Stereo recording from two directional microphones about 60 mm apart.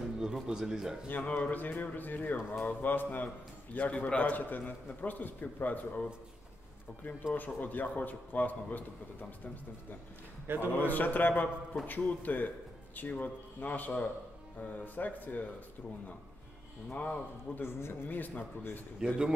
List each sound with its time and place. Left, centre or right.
0.2 s speech: centre
1.2 s a man's voice: left
7.3 s a man's voice: left
10.4 s a man's voice: right
10.7 s a man's voice: left
16.9 s a man's voice: left
17.6 s a man's voice: left
18.1 s a man's voice: left
18.9 s speech: centre